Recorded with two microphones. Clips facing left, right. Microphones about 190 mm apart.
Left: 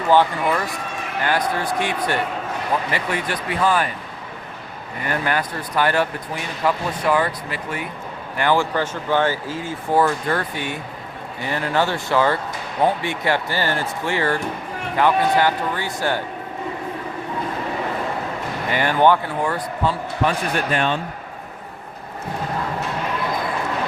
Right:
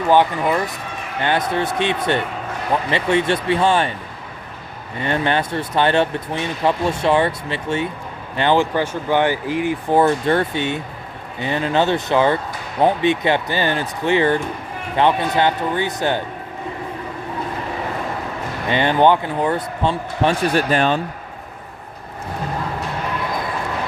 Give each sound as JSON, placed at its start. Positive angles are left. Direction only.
{"t": 0.1, "sound": "speech", "side_deg": -15}
{"t": 4.9, "sound": "speech", "side_deg": -25}
{"t": 18.7, "sound": "speech", "side_deg": -20}